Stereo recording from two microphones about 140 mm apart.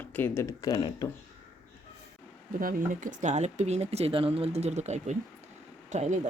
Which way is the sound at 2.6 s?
80° right.